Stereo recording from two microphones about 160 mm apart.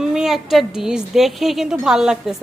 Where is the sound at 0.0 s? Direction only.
5° right (ahead or behind).